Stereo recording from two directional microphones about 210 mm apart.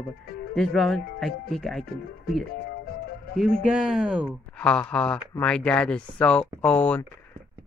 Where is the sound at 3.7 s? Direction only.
Centre (ahead or behind).